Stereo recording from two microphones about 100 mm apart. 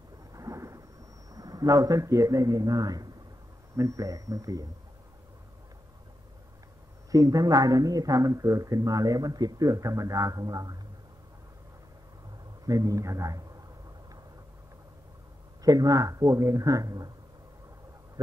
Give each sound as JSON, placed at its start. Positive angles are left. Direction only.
{"t": 0.3, "sound": "thunder", "side_deg": -35}
{"t": 1.3, "sound": "speech", "side_deg": -35}
{"t": 7.1, "sound": "speech", "side_deg": -35}
{"t": 12.6, "sound": "speech", "side_deg": -35}
{"t": 15.6, "sound": "speech", "side_deg": -35}